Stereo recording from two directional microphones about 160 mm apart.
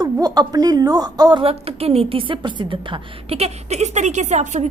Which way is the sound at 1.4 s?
40° right (ahead or behind).